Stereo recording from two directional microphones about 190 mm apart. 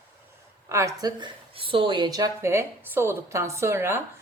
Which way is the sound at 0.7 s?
15° right (ahead or behind).